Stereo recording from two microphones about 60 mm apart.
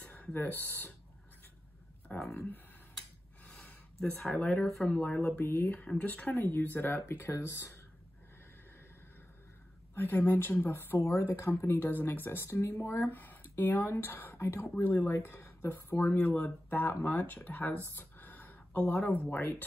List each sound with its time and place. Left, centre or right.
0.1 s speech: left
2.3 s speech: left
4.0 s speech: centre
4.3 s speech: left
4.6 s speech: centre
4.8 s speech: left
5.4 s speech: left
9.9 s speech: left
11.0 s speech: left
12.4 s speech: left
13.1 s speech: left
17.9 s a sound: left